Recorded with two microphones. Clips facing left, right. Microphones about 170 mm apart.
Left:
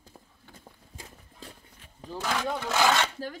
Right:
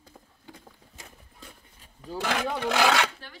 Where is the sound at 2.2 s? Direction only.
65° right (ahead or behind).